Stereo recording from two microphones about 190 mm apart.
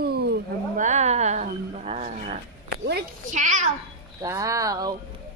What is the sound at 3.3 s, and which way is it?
Speech, 40° right (ahead or behind).